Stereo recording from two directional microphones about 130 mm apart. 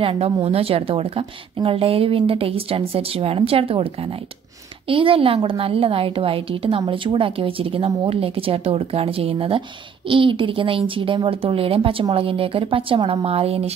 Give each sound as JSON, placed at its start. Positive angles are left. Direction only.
{"t": 0.0, "sound": "a woman's voice", "side_deg": -45}